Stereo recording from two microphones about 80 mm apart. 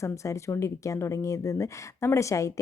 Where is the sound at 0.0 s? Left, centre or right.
Left.